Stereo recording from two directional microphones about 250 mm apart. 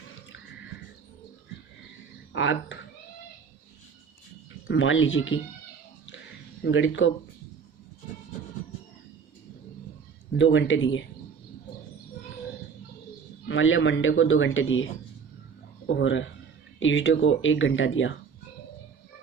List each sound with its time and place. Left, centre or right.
2.3 s speech: left
4.7 s speech: left
6.7 s speech: left
10.3 s speech: left
13.5 s speech: left
16.0 s speech: left